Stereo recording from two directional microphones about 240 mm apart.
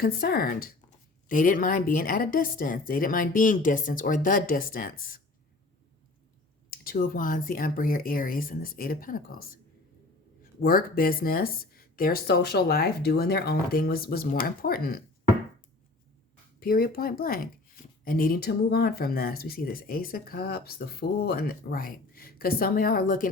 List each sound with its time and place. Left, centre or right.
0.0 s speech: left
6.7 s speech: left
10.6 s speech: left
16.6 s speech: left